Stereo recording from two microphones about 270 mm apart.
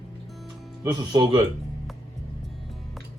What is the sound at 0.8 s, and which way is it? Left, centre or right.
Speech, centre.